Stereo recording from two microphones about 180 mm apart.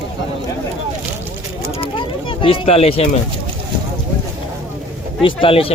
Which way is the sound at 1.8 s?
30° left (ahead or behind).